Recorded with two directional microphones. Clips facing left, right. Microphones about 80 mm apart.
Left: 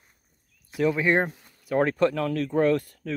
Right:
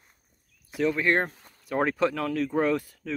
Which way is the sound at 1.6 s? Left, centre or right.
Centre.